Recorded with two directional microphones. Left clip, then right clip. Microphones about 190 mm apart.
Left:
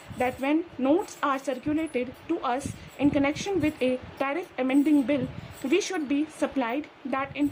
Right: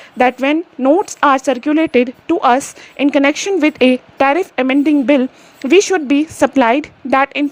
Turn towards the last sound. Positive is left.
turn(degrees=-40)  # may be behind; listen again after turning